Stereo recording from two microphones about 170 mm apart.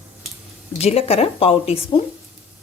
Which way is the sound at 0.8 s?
35° left (ahead or behind).